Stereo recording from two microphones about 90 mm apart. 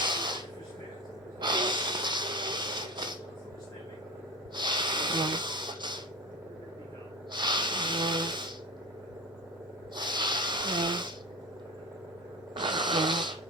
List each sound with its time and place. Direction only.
0.0 s spray: 55° right (ahead or behind)
1.4 s gasp: 55° right (ahead or behind)
4.5 s snort: 55° right (ahead or behind)
7.3 s snoring: 60° right (ahead or behind)
9.9 s wheeze: 55° right (ahead or behind)
12.5 s wheeze: 55° right (ahead or behind)